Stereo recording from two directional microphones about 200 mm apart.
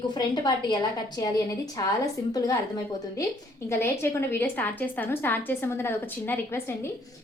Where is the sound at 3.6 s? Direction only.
15° left (ahead or behind).